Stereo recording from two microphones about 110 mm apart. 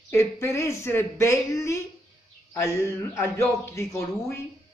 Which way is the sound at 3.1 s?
25° left (ahead or behind).